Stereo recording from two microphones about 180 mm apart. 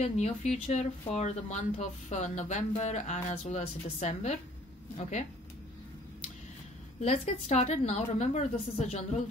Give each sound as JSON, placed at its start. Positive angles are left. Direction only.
{"t": 0.0, "sound": "speech", "side_deg": 40}
{"t": 7.0, "sound": "speech", "side_deg": 40}